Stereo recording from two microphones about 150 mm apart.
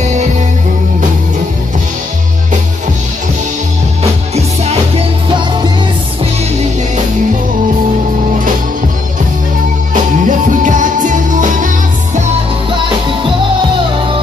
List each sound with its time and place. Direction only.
0.0 s music: 50° right (ahead or behind)
10.2 s music: 55° right (ahead or behind)